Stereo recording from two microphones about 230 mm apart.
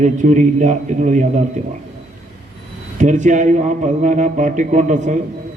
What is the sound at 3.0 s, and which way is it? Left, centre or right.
A man's voice, right.